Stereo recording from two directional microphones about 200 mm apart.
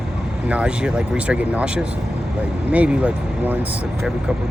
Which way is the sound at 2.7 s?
5° right (ahead or behind).